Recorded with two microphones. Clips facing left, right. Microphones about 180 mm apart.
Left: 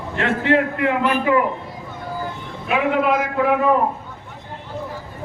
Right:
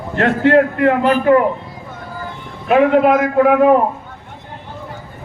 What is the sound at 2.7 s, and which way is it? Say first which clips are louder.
Speech: right 7 dB; 45° right (ahead or behind).